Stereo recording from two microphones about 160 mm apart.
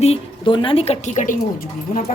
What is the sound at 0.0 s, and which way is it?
A woman's voice, 35° left (ahead or behind).